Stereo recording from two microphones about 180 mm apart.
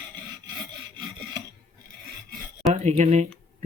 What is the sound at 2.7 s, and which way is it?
Speech, 40° right (ahead or behind).